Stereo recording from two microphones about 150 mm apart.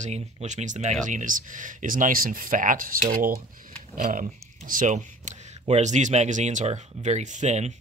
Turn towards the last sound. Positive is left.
turn(degrees=-50)  # may be behind; listen again after turning